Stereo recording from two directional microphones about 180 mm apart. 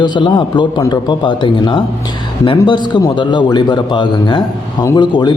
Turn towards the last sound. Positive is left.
turn(degrees=25)  # may be behind; listen again after turning